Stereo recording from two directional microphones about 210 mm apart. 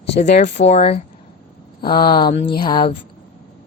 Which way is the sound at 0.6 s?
30° left (ahead or behind).